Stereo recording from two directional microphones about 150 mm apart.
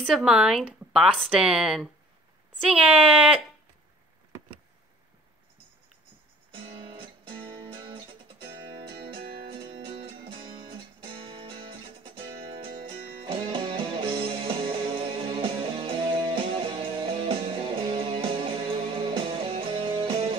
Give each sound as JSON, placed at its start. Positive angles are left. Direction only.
{"t": 0.0, "sound": "a woman's voice", "side_deg": -5}
{"t": 6.5, "sound": "music", "side_deg": -40}